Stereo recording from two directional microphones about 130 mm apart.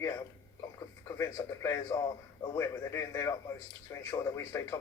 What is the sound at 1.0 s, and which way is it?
Speech, 20° left (ahead or behind).